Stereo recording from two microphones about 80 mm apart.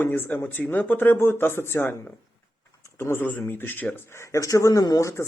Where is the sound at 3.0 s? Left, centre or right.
Left.